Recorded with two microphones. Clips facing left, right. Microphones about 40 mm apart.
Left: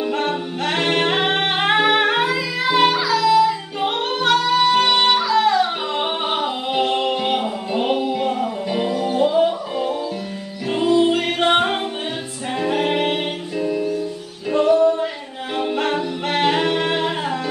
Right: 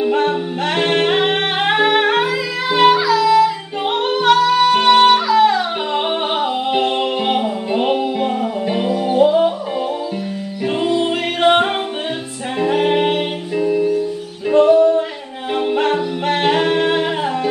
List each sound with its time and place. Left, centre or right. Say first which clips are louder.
0.0 s music: right 5 dB; centre
9.1 s music: right 6 dB; right
10.7 s music: left 2 dB; centre